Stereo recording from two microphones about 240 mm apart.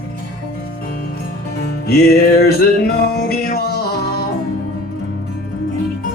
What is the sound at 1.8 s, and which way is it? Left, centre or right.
Music, left.